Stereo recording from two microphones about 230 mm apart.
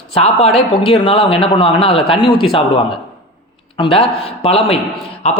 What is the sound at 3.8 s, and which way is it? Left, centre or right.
A man's voice, left.